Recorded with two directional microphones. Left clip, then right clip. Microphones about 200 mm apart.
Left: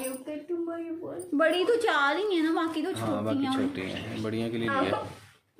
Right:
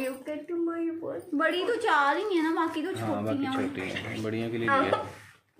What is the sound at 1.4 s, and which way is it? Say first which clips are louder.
A woman's voice: left 3 dB; 60° left (ahead or behind).